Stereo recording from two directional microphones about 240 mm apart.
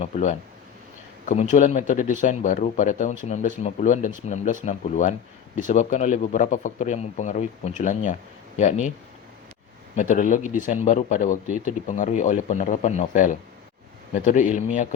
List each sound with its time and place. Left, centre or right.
0.0 s speech: left
9.9 s speech: left